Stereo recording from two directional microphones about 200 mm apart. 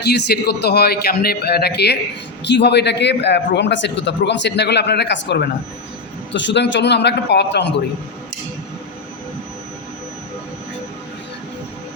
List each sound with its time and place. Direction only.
0.0 s a man's voice: 55° left (ahead or behind)